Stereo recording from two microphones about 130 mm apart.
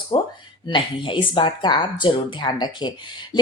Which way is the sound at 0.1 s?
50° left (ahead or behind).